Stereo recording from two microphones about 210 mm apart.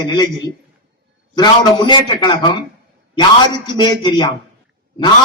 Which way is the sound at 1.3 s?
20° left (ahead or behind).